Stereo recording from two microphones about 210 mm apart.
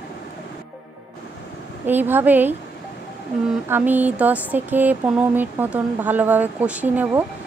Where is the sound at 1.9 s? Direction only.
10° right (ahead or behind).